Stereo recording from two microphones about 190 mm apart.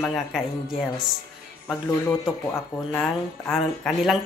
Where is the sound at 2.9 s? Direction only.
5° left (ahead or behind).